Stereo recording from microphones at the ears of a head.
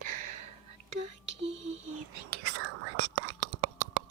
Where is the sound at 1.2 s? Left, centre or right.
Right.